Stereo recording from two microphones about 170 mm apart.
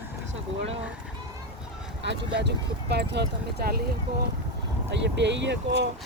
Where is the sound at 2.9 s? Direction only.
80° right.